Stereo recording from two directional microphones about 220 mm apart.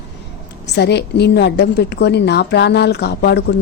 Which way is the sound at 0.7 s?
50° left (ahead or behind).